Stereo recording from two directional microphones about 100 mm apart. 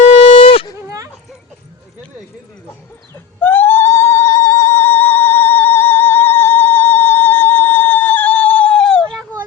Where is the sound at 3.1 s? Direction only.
20° left (ahead or behind).